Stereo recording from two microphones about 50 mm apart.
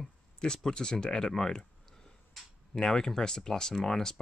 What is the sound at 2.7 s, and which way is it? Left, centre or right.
Speech, centre.